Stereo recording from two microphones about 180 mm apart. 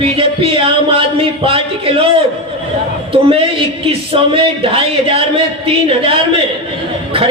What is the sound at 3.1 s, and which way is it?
Speech, 30° right (ahead or behind).